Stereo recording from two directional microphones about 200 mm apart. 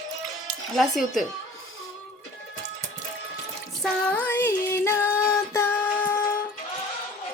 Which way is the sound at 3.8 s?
10° left (ahead or behind).